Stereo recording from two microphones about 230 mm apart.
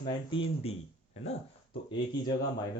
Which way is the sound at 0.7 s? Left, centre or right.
Left.